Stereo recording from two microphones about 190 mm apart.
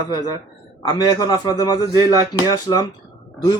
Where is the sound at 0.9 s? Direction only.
20° left (ahead or behind).